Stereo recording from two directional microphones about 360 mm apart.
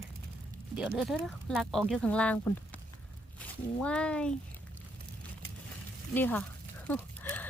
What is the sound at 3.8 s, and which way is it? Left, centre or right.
Speech, centre.